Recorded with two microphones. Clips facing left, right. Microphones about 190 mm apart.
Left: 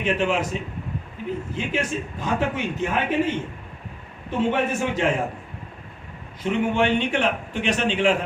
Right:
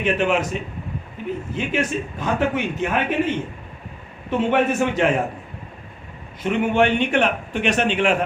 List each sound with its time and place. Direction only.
0.0 s a man's voice: 60° right (ahead or behind)
6.4 s a man's voice: 60° right (ahead or behind)